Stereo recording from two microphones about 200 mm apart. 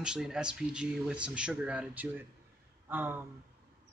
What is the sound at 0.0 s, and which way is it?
Speech, 5° right (ahead or behind).